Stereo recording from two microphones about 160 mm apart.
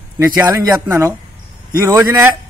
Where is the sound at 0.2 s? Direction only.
20° right (ahead or behind).